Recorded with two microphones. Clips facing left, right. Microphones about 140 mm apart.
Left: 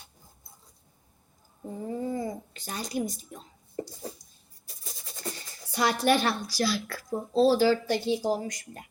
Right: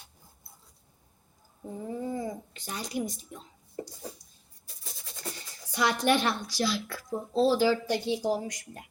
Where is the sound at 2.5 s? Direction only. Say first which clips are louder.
Left 2 dB; 15° right (ahead or behind).